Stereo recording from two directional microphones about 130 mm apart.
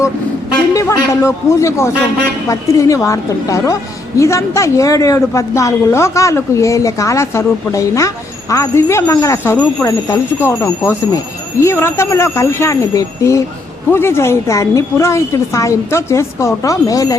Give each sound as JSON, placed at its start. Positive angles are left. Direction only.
{"t": 0.7, "sound": "a woman's voice", "side_deg": 25}